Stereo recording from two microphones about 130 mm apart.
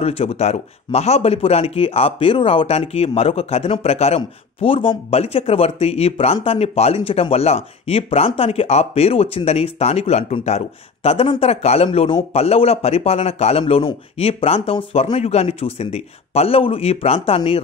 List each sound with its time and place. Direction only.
0.0 s speech: 50° left (ahead or behind)